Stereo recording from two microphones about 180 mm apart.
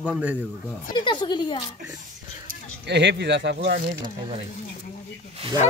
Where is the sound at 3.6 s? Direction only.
40° right (ahead or behind).